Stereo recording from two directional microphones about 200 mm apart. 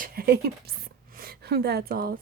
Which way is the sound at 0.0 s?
50° right (ahead or behind).